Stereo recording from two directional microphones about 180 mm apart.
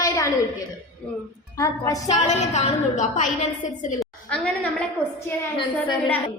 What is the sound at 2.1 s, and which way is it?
A woman's voice, 40° left (ahead or behind).